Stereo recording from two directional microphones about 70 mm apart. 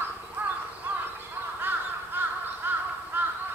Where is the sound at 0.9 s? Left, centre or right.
Right.